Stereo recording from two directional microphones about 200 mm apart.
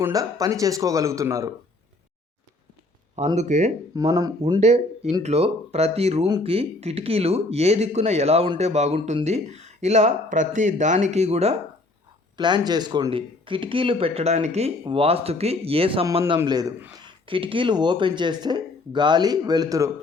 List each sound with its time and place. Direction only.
0.0 s speech: 15° right (ahead or behind)
3.3 s speech: 35° right (ahead or behind)
3.9 s speech: 20° right (ahead or behind)
4.6 s speech: 35° right (ahead or behind)
16.4 s speech: 20° right (ahead or behind)